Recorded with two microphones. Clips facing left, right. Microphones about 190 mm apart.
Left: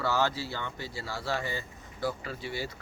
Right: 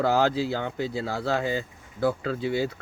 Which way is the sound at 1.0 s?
55° right (ahead or behind).